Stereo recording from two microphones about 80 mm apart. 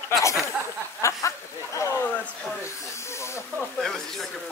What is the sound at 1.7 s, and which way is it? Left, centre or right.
Speech, left.